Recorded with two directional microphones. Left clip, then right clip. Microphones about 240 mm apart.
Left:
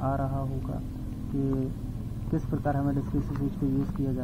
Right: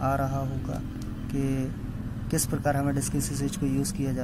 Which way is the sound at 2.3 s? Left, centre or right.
Right.